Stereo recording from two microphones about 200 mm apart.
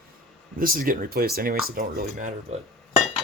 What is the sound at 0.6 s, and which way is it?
Speech, 45° right (ahead or behind).